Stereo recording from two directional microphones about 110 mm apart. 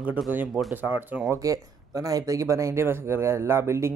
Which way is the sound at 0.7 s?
15° right (ahead or behind).